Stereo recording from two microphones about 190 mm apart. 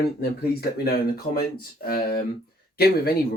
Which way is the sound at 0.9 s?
50° left (ahead or behind).